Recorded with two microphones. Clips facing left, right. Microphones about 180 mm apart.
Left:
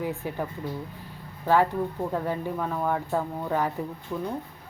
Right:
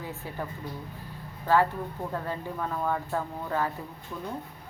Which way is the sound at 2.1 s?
15° left (ahead or behind).